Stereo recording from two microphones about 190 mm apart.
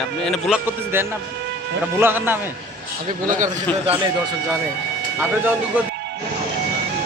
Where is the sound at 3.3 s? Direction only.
40° right (ahead or behind).